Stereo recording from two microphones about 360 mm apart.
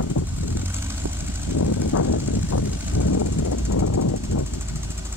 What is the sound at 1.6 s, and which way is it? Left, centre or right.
Vehicle, left.